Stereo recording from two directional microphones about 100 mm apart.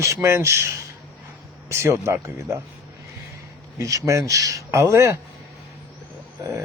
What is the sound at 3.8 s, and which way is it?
Speech, 30° right (ahead or behind).